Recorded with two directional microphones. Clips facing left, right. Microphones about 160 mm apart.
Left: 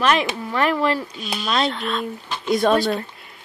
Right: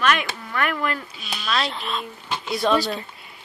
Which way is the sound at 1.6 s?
Centre (ahead or behind).